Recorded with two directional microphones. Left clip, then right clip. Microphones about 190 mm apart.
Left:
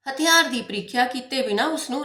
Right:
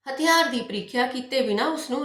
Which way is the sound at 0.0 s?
45° left (ahead or behind).